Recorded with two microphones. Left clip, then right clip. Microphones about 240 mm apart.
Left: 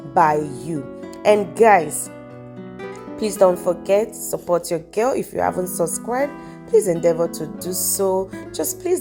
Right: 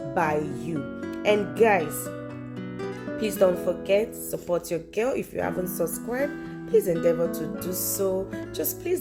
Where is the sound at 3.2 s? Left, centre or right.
Centre.